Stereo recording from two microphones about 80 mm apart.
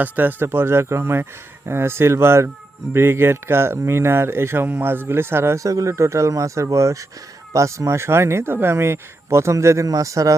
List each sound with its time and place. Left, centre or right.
0.0 s speech: right
5.6 s speech: right